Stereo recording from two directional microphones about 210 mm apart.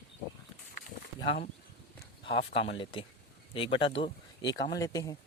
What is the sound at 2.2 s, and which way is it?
Speech, 25° left (ahead or behind).